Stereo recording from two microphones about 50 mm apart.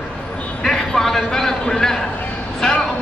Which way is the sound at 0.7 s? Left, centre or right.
Centre.